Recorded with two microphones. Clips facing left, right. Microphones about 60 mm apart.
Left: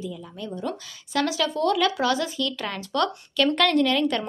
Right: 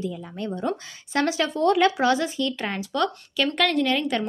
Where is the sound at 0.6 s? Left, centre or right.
Right.